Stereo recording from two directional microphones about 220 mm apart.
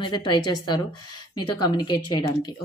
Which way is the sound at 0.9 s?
90° left.